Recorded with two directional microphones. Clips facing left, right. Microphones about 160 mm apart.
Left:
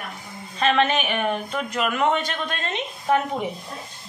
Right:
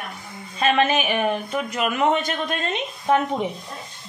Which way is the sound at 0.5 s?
10° right (ahead or behind).